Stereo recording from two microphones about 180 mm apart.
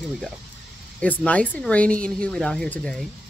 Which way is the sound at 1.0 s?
10° left (ahead or behind).